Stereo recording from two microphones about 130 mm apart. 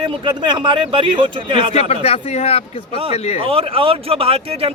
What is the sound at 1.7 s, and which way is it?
A man's voice, 55° left (ahead or behind).